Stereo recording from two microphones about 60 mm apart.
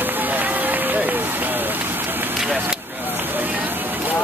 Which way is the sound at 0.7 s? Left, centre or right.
Right.